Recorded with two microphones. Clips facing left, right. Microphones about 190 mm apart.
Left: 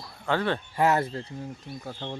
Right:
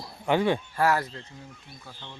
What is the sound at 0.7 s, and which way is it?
Speech, 20° left (ahead or behind).